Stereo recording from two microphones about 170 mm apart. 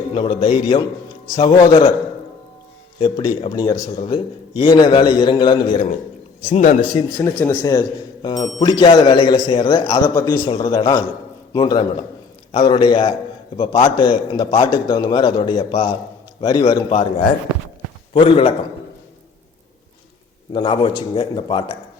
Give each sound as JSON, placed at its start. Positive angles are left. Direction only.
{"t": 0.1, "sound": "a man's voice", "side_deg": 30}
{"t": 3.0, "sound": "speech", "side_deg": 30}
{"t": 6.5, "sound": "a man's voice", "side_deg": 50}
{"t": 6.9, "sound": "speech", "side_deg": 20}
{"t": 16.9, "sound": "a man's voice", "side_deg": 35}
{"t": 20.5, "sound": "speech", "side_deg": 25}